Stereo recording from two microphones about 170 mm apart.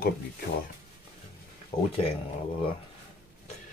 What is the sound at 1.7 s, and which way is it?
Speech, 35° left (ahead or behind).